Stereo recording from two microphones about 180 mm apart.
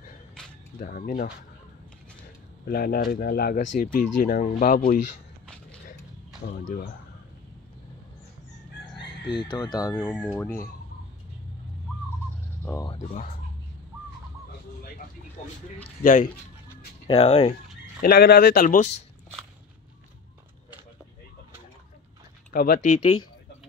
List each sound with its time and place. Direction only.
0.4 s a sound: 5° left (ahead or behind)
0.7 s speech: 50° left (ahead or behind)
2.6 s speech: 55° left (ahead or behind)
6.4 s speech: 50° left (ahead or behind)
9.3 s speech: 25° left (ahead or behind)
9.9 s speech: 5° left (ahead or behind)
12.8 s speech: 30° left (ahead or behind)
16.0 s speech: 50° left (ahead or behind)
17.1 s speech: 35° left (ahead or behind)
18.0 s speech: 60° left (ahead or behind); by 19.0 s 40° left (ahead or behind)
22.5 s speech: 55° left (ahead or behind)